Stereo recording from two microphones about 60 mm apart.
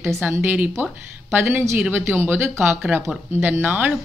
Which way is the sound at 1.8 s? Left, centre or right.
Right.